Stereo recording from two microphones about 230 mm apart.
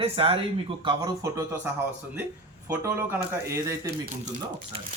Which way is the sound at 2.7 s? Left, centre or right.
Centre.